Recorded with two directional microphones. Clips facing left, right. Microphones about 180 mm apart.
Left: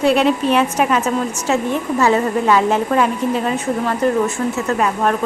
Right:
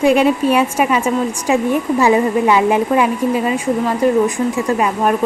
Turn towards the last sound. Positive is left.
turn(degrees=-10)  # may be behind; listen again after turning